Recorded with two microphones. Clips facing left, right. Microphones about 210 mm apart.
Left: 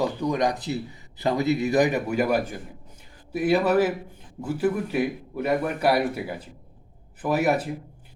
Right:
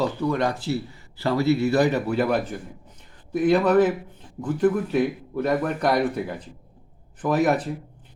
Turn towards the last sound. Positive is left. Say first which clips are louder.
# right 2 dB
turn(degrees=10)  # may be behind; listen again after turning